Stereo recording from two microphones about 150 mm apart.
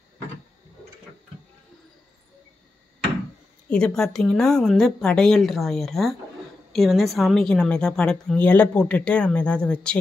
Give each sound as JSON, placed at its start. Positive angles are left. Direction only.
{"t": 3.6, "sound": "a woman's voice", "side_deg": 5}